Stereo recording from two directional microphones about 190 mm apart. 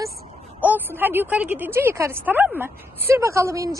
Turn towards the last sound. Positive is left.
turn(degrees=-15)  # may be behind; listen again after turning